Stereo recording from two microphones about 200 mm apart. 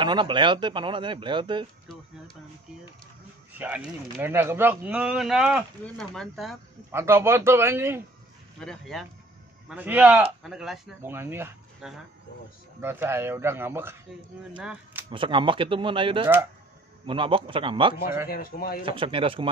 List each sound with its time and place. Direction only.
0.0 s speech: 25° right (ahead or behind)
3.5 s speech: 10° right (ahead or behind)
6.9 s speech: 10° right (ahead or behind)
8.5 s speech: centre (ahead or behind)
15.0 s speech: 25° right (ahead or behind)
18.3 s speech: 45° left (ahead or behind)
18.9 s speech: 25° right (ahead or behind)